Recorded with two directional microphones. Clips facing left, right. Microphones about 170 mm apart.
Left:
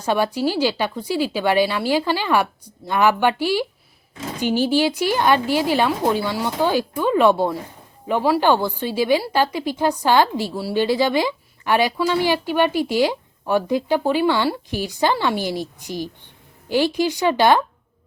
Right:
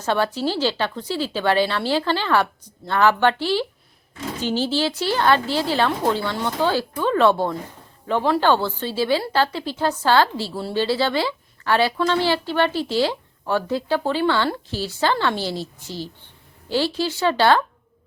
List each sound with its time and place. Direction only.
0.0 s a woman's voice: 10° left (ahead or behind)